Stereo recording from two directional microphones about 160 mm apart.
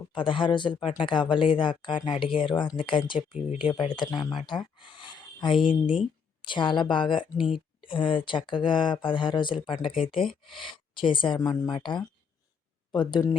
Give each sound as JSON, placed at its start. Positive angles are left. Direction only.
{"t": 0.1, "sound": "speech", "side_deg": 30}
{"t": 3.2, "sound": "speech", "side_deg": 45}
{"t": 3.6, "sound": "a woman's voice", "side_deg": 30}